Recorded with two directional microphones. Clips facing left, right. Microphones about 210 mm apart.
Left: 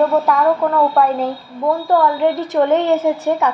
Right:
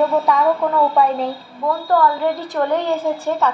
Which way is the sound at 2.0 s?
20° left (ahead or behind).